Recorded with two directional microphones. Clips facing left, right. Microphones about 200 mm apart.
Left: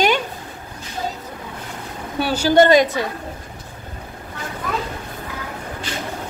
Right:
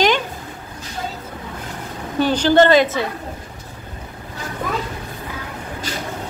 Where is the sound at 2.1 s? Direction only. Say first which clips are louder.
Right 1 dB; 10° left (ahead or behind).